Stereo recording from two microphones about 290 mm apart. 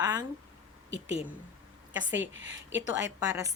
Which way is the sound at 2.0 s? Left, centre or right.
Right.